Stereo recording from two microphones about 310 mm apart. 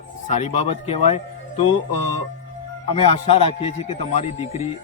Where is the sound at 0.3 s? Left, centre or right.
Left.